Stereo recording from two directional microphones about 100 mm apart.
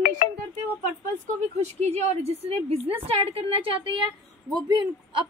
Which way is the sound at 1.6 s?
90° right.